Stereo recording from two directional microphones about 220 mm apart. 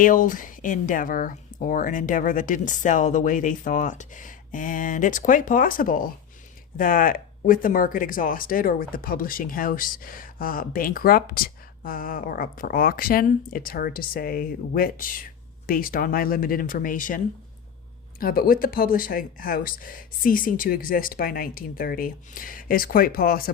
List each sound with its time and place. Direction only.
0.0 s speech: 35° left (ahead or behind)
18.2 s speech: 40° left (ahead or behind)